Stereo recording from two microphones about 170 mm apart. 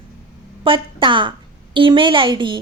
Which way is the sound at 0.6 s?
30° right (ahead or behind).